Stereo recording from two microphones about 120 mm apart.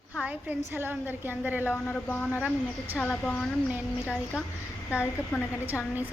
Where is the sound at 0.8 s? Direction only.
15° right (ahead or behind).